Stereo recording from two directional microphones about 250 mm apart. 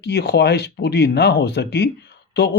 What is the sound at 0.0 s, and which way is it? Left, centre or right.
Speech, left.